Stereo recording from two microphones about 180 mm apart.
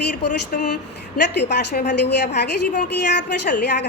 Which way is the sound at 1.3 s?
70° left (ahead or behind).